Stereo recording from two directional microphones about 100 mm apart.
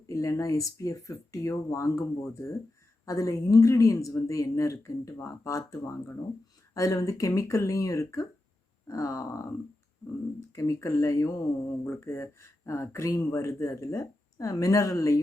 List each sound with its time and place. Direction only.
0.1 s speech: 35° left (ahead or behind)
10.5 s speech: 30° left (ahead or behind)